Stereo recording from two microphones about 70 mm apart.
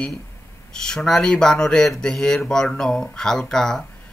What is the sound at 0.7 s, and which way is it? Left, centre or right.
Speech, centre.